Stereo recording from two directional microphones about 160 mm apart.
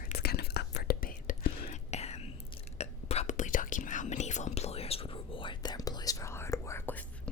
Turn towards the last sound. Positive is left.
turn(degrees=15)  # may be behind; listen again after turning